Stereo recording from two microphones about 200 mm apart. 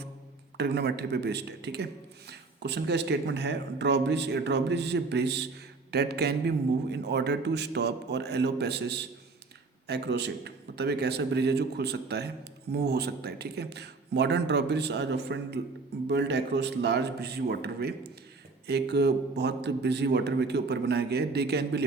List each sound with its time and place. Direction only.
0.5 s a man's voice: 55° right (ahead or behind)
5.9 s a sound: 55° right (ahead or behind)
6.9 s a man's voice: 55° right (ahead or behind)